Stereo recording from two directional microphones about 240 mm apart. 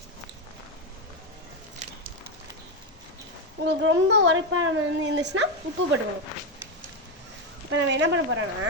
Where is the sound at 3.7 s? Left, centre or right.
Right.